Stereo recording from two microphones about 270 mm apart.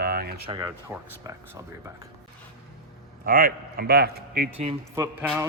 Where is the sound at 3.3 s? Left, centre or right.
Right.